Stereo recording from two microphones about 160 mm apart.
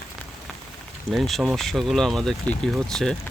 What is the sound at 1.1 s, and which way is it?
Speech, centre (ahead or behind).